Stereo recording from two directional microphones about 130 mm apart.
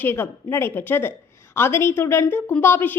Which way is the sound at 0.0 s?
15° left (ahead or behind).